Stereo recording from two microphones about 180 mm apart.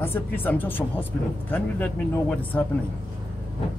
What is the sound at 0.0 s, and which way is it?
A man's voice, 10° left (ahead or behind).